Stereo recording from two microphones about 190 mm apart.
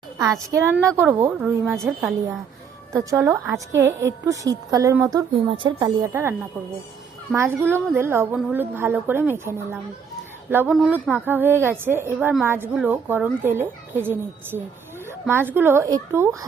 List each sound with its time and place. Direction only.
0.2 s a woman's voice: 15° right (ahead or behind); by 2.1 s centre (ahead or behind)
2.9 s a woman's voice: 15° right (ahead or behind)
7.3 s a woman's voice: 15° right (ahead or behind)